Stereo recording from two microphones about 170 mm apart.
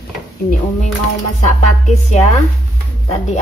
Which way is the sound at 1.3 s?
45° left (ahead or behind).